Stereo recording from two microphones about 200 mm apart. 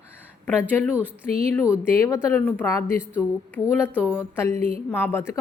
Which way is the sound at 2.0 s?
15° left (ahead or behind).